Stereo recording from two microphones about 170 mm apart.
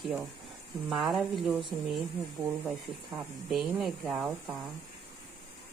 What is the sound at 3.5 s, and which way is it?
Speech, centre (ahead or behind).